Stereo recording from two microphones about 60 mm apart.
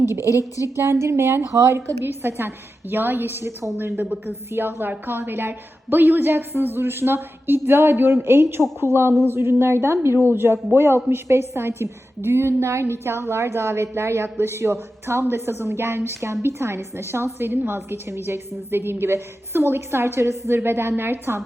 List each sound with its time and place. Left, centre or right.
0.1 s a woman's voice: right
0.3 s a woman's voice: left
0.8 s a woman's voice: right